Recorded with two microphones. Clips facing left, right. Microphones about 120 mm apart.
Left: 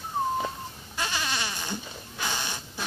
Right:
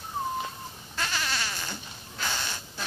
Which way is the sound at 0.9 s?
15° left (ahead or behind).